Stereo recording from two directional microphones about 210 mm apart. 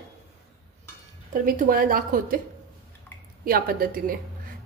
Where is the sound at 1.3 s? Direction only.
40° right (ahead or behind).